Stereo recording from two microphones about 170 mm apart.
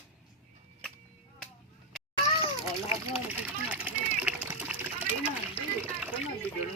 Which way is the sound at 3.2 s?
10° right (ahead or behind).